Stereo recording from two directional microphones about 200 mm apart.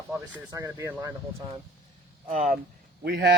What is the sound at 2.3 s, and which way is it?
Speech, 40° right (ahead or behind).